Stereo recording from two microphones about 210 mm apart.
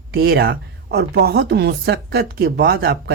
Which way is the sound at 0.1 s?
50° right (ahead or behind).